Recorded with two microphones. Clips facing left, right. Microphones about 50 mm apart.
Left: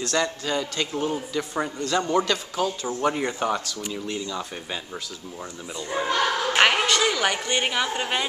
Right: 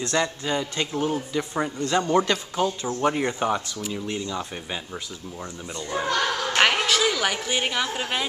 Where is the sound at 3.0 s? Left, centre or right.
Centre.